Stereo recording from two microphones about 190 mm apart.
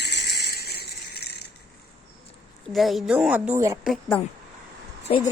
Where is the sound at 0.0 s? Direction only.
60° left (ahead or behind).